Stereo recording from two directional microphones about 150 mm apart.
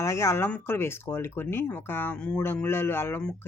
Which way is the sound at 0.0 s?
20° left (ahead or behind).